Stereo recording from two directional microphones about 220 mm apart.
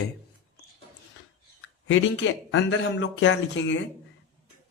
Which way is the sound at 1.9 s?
60° left (ahead or behind).